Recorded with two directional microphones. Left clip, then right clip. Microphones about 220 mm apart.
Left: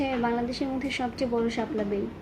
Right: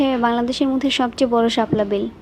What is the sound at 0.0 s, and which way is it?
Speech, 45° right (ahead or behind).